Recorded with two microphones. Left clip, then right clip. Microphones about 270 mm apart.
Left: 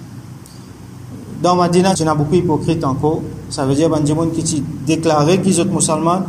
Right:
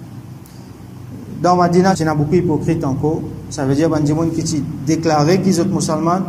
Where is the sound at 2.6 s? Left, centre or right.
Centre.